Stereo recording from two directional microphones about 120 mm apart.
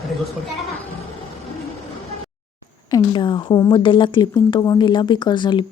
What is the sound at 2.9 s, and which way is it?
Speech, 40° left (ahead or behind).